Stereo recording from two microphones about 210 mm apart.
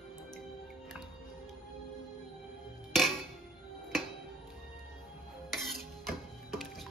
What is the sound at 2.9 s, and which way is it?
Music, centre (ahead or behind).